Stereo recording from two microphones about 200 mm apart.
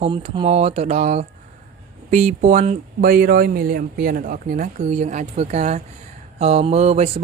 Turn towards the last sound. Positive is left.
turn(degrees=-30)  # may be behind; listen again after turning